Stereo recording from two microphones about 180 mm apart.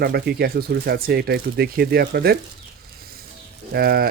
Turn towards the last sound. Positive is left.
turn(degrees=-60)  # may be behind; listen again after turning